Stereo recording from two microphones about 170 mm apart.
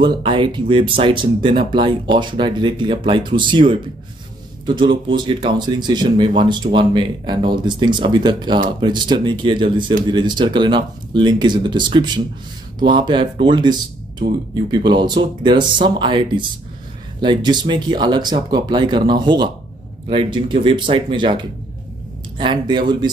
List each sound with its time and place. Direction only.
0.0 s speech: 30° right (ahead or behind)